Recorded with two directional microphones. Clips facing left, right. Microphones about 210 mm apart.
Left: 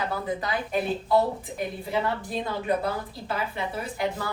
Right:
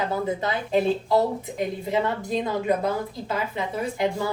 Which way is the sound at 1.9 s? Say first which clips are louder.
Right 3 dB; 20° right (ahead or behind).